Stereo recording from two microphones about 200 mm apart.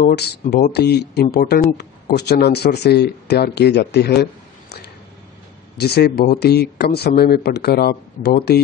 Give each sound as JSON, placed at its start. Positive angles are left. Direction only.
{"t": 0.0, "sound": "speech", "side_deg": 55}
{"t": 5.8, "sound": "speech", "side_deg": 55}